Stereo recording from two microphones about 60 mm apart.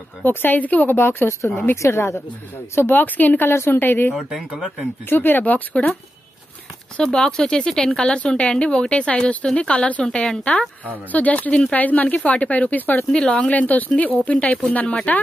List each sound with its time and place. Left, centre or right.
0.2 s a woman's voice: left
0.9 s a woman's voice: left
4.1 s speech: centre
5.1 s speech: left
7.0 s speech: centre
11.1 s speech: left
13.1 s speech: centre
13.5 s speech: left